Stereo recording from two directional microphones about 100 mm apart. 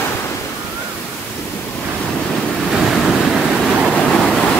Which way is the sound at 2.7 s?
Centre (ahead or behind).